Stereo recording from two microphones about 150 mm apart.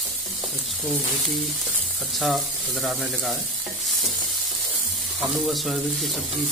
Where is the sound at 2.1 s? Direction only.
Centre (ahead or behind).